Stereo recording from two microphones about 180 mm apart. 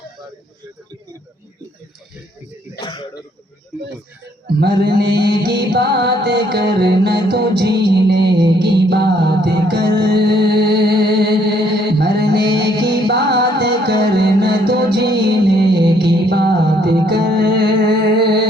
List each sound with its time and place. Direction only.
2.8 s throat clearing: 25° left (ahead or behind)
4.4 s music: 65° right (ahead or behind)